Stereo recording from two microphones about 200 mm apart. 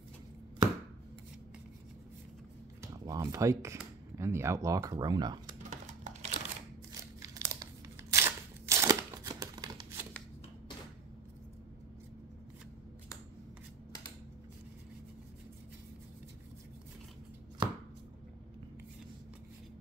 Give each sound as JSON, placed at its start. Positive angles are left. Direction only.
{"t": 2.8, "sound": "speech", "side_deg": -15}
{"t": 5.6, "sound": "crumpling", "side_deg": -35}
{"t": 6.9, "sound": "crumpling", "side_deg": -15}
{"t": 8.1, "sound": "a sound", "side_deg": -15}
{"t": 17.6, "sound": "chopping", "side_deg": -20}